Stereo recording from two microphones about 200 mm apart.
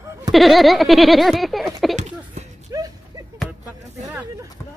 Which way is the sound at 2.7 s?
20° right (ahead or behind).